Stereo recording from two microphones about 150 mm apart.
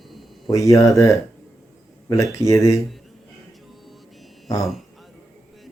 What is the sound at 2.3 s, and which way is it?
Speech, 20° left (ahead or behind).